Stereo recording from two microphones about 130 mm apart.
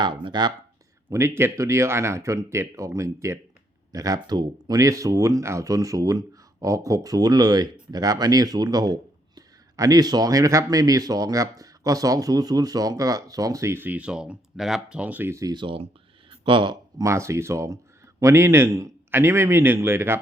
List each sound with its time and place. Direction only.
0.0 s speech: 40° right (ahead or behind)
1.1 s speech: 20° right (ahead or behind); by 16.7 s 40° right (ahead or behind)
17.0 s speech: 20° right (ahead or behind)